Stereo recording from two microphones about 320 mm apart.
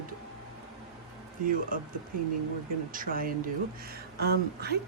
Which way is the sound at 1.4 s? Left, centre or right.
Right.